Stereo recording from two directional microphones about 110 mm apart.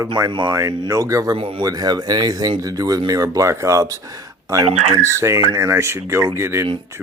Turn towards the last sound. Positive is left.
turn(degrees=-25)  # may be behind; listen again after turning